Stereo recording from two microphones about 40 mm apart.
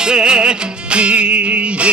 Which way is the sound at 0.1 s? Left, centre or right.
Right.